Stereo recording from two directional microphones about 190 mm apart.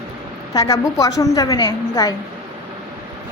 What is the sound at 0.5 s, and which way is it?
A woman's voice, 20° left (ahead or behind).